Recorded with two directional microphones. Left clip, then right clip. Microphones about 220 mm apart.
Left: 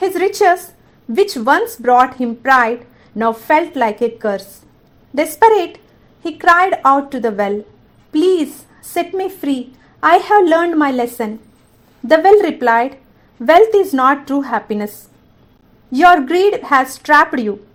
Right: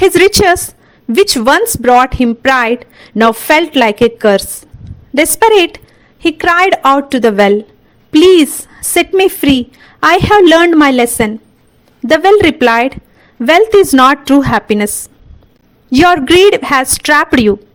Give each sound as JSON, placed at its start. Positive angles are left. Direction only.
{"t": 0.2, "sound": "a woman's voice", "side_deg": -35}
{"t": 5.1, "sound": "a woman's voice", "side_deg": -55}
{"t": 6.3, "sound": "a woman's voice", "side_deg": -40}
{"t": 8.9, "sound": "a woman's voice", "side_deg": -35}
{"t": 15.9, "sound": "a woman's voice", "side_deg": -40}